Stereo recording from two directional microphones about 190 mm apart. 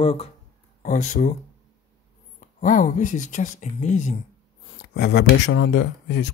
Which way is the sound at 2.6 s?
40° left (ahead or behind).